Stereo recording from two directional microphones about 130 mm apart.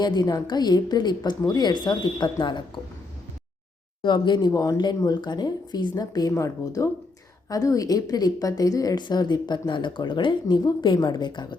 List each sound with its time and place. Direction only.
0.0 s speech: 30° left (ahead or behind)
4.0 s speech: 35° left (ahead or behind)